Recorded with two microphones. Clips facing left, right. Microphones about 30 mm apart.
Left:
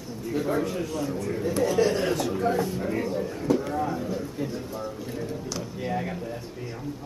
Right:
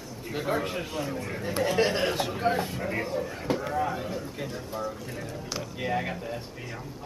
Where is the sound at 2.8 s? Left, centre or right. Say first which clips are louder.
Left 2 dB; right.